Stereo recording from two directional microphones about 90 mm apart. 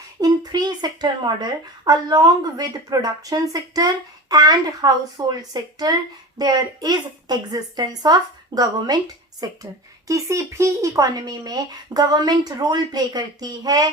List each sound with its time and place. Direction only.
0.2 s speech: 50° right (ahead or behind)
10.1 s speech: 35° right (ahead or behind)